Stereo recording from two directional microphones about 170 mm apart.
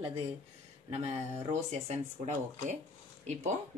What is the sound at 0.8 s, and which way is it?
Speech, 40° right (ahead or behind).